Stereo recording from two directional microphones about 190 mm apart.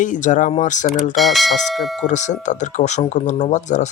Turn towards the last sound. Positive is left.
turn(degrees=40)  # may be behind; listen again after turning